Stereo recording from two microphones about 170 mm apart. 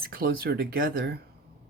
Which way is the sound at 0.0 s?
60° right (ahead or behind).